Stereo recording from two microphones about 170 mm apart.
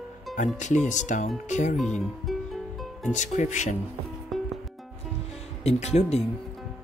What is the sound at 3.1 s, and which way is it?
Speech, 45° left (ahead or behind).